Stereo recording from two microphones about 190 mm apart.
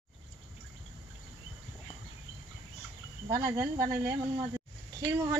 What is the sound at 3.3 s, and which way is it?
Speech, 15° right (ahead or behind).